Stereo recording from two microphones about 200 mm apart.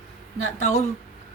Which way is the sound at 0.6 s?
35° left (ahead or behind).